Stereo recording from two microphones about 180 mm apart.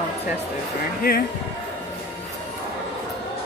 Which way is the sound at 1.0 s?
55° left (ahead or behind).